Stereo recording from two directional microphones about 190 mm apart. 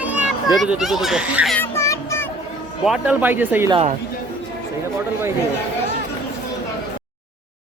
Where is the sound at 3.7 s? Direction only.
35° right (ahead or behind).